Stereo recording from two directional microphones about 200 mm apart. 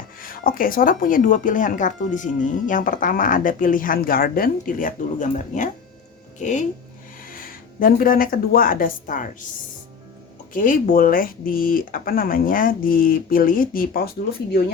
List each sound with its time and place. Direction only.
0.2 s speech: 45° left (ahead or behind)
10.5 s speech: 45° left (ahead or behind)